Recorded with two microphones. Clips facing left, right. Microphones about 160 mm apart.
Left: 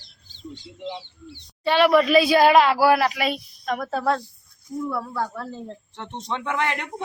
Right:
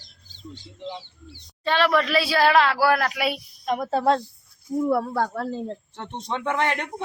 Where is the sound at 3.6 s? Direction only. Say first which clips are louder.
Right 3 dB; 20° right (ahead or behind).